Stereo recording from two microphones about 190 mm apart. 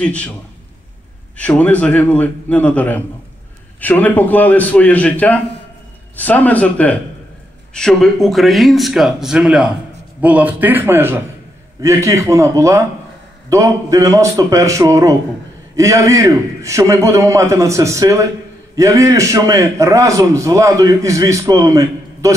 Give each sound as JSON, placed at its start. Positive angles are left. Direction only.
{"t": 0.0, "sound": "speech", "side_deg": 5}
{"t": 1.3, "sound": "a man's voice", "side_deg": 5}